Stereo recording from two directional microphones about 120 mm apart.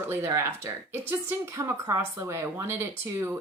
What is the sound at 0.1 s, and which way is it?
Speech, 20° right (ahead or behind).